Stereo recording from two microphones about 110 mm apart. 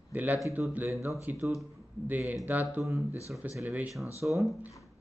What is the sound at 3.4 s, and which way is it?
Speech, 15° right (ahead or behind).